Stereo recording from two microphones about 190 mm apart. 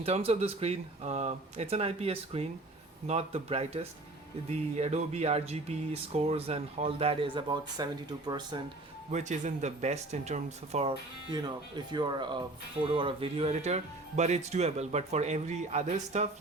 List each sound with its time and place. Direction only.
0.0 s speech: 30° right (ahead or behind)
9.1 s speech: 40° right (ahead or behind)